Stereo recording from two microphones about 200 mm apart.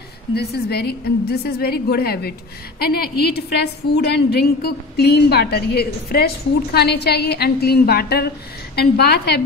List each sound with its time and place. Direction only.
0.3 s a woman's voice: 55° left (ahead or behind)